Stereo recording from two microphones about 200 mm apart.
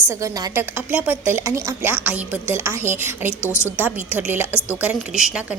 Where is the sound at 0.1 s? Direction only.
15° right (ahead or behind).